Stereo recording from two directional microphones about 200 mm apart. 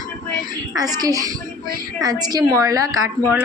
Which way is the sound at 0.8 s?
20° right (ahead or behind).